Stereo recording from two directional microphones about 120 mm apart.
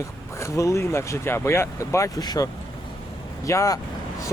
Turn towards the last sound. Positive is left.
turn(degrees=25)  # may be behind; listen again after turning